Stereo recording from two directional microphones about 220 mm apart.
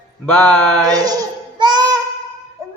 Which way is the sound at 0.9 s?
15° right (ahead or behind).